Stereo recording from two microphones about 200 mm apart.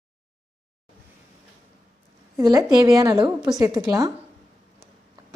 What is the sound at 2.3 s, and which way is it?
A woman's voice, 15° right (ahead or behind).